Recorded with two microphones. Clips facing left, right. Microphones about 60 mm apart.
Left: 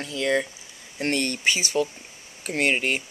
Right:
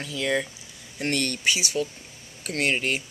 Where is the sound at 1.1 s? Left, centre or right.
Centre.